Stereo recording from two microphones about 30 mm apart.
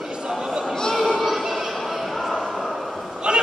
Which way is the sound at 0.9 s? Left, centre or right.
Centre.